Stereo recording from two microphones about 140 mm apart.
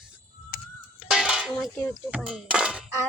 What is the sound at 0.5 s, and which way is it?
Music, 85° left.